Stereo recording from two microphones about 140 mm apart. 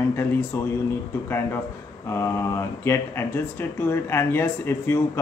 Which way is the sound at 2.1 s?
20° left (ahead or behind).